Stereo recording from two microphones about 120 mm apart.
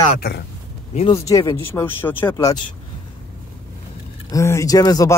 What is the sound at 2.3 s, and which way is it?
Speech, 30° left (ahead or behind).